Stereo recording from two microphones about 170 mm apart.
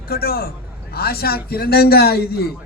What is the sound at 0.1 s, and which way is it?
A man's voice, 65° left (ahead or behind).